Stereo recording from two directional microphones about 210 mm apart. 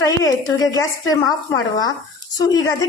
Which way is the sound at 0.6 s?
15° left (ahead or behind).